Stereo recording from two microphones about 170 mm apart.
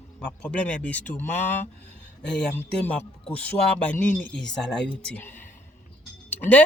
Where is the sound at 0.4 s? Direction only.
10° left (ahead or behind).